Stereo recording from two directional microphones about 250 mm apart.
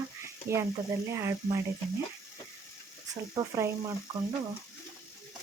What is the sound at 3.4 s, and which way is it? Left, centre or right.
Speech, centre.